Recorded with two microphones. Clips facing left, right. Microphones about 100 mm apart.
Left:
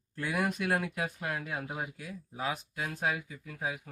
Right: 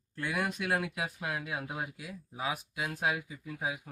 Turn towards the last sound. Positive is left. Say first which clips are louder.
# even
turn(degrees=-15)  # may be behind; listen again after turning